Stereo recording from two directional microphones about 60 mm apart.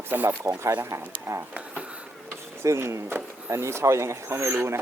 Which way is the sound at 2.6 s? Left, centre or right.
Right.